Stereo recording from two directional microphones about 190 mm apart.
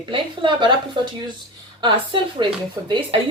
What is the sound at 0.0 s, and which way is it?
Speech, 25° right (ahead or behind).